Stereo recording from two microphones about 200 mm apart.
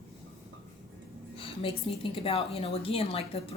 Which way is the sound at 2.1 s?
30° left (ahead or behind).